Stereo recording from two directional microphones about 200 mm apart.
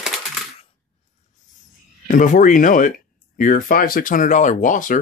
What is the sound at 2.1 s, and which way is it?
Speech, 40° left (ahead or behind).